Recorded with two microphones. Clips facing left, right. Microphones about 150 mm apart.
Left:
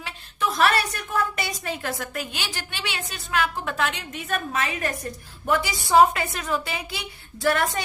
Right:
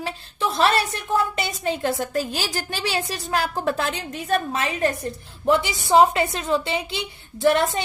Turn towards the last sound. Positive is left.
turn(degrees=-25)  # may be behind; listen again after turning